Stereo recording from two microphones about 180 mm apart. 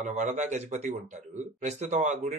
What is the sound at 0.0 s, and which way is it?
Speech, 40° right (ahead or behind).